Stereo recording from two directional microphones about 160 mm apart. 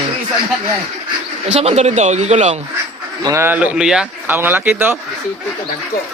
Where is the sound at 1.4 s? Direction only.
45° right (ahead or behind).